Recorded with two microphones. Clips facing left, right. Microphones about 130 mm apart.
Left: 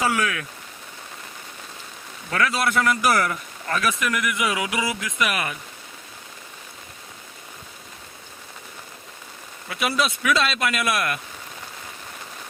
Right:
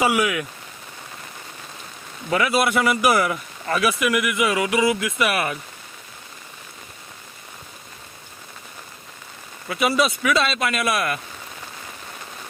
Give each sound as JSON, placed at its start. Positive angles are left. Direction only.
{"t": 0.0, "sound": "speech", "side_deg": -10}
{"t": 2.3, "sound": "a man's voice", "side_deg": -15}
{"t": 9.6, "sound": "a man's voice", "side_deg": 0}